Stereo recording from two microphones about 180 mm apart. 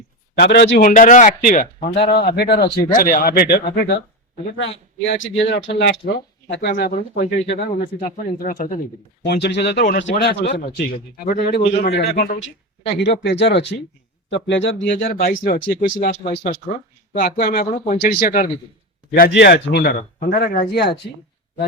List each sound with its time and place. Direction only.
0.3 s a man's voice: 70° left (ahead or behind); by 1.6 s 45° left (ahead or behind)
2.0 s speech: 60° left (ahead or behind)
4.5 s speech: 85° left; by 7.9 s 60° left (ahead or behind)
7.9 s speech: 35° left (ahead or behind)
8.4 s a man's voice: 50° left (ahead or behind)
9.2 s speech: 65° left (ahead or behind)
10.6 s speech: 50° left (ahead or behind)
11.8 s speech: 70° left (ahead or behind)
12.4 s speech: 70° left (ahead or behind); by 15.0 s 90° left
15.0 s a man's voice: 55° left (ahead or behind)
19.3 s speech: 70° left (ahead or behind)